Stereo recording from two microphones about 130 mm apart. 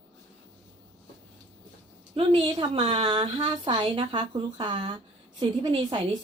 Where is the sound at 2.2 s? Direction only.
45° right (ahead or behind).